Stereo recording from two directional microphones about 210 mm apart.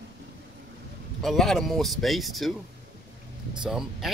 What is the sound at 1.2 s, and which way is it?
Speech, centre (ahead or behind).